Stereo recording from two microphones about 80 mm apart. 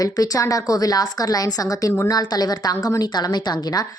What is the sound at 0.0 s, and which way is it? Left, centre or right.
Speech, left.